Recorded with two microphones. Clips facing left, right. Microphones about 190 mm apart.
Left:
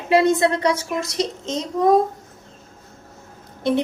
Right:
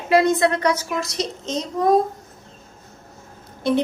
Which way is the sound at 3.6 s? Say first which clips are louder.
Even; 20° left (ahead or behind).